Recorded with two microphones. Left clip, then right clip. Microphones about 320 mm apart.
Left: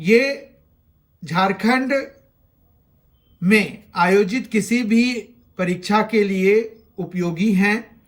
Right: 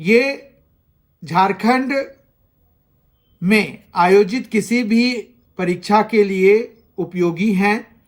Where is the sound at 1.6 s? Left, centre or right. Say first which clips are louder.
Right 2 dB; left.